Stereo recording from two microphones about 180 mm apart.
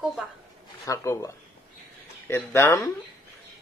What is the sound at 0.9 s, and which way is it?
A woman's voice, 20° left (ahead or behind).